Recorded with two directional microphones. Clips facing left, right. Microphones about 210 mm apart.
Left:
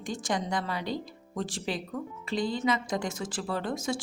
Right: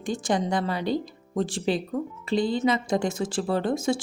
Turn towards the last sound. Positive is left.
turn(degrees=-25)  # may be behind; listen again after turning